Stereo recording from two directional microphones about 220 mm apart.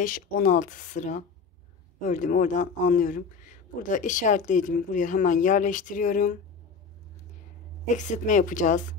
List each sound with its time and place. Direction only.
0.0 s speech: 40° left (ahead or behind)
7.8 s speech: 35° left (ahead or behind)